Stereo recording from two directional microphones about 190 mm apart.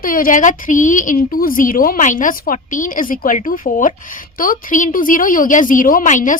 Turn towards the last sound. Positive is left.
turn(degrees=40)  # may be behind; listen again after turning